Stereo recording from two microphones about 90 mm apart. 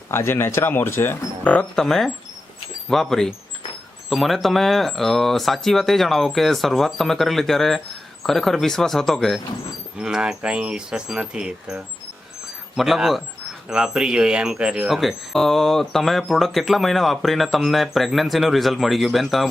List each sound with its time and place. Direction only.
0.1 s speech: 25° left (ahead or behind)
1.7 s speech: 5° left (ahead or behind)